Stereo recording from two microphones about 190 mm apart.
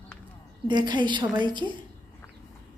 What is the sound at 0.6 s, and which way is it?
A woman's voice, 25° right (ahead or behind).